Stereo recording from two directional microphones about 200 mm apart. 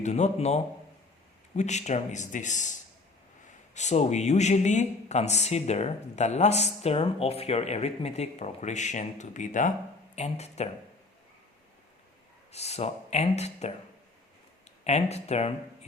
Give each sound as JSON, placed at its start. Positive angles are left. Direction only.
{"t": 0.0, "sound": "speech", "side_deg": 35}
{"t": 3.8, "sound": "speech", "side_deg": 35}
{"t": 12.5, "sound": "speech", "side_deg": 30}
{"t": 14.8, "sound": "speech", "side_deg": 35}